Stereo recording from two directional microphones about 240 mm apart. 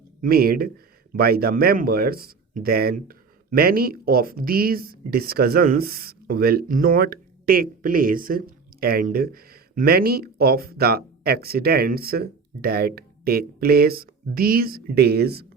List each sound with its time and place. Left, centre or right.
0.2 s speech: right